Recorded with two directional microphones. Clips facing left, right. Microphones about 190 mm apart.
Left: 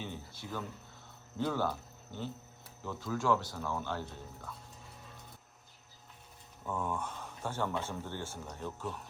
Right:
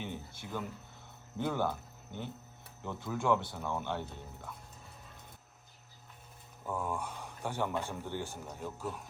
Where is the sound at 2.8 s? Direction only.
20° right (ahead or behind).